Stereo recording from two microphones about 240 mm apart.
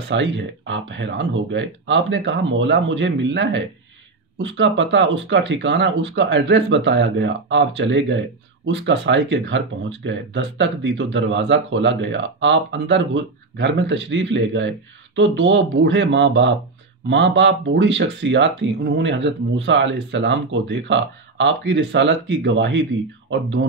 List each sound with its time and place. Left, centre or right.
0.1 s speech: right